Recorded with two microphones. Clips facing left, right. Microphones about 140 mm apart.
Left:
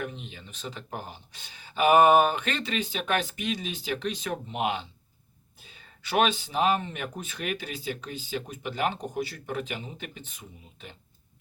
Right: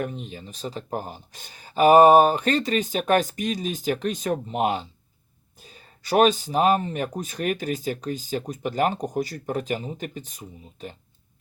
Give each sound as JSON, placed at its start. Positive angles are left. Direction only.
{"t": 0.0, "sound": "speech", "side_deg": -40}